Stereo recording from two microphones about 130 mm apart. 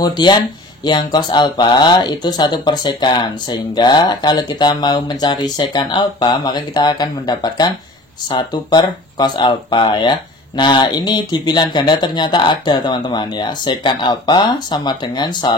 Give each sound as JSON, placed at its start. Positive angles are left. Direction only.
{"t": 0.0, "sound": "speech", "side_deg": 35}